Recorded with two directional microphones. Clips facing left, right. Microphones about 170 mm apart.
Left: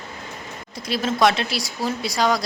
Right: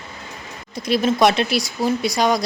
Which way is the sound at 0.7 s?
20° right (ahead or behind).